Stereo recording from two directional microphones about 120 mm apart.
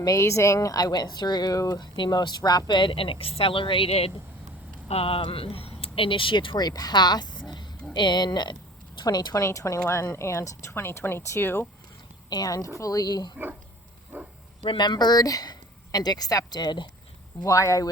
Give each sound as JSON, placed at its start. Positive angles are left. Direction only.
{"t": 0.0, "sound": "speech", "side_deg": 25}
{"t": 12.3, "sound": "speech", "side_deg": 30}
{"t": 14.1, "sound": "bow-wow", "side_deg": -15}
{"t": 14.6, "sound": "speech", "side_deg": 45}
{"t": 17.4, "sound": "speech", "side_deg": 25}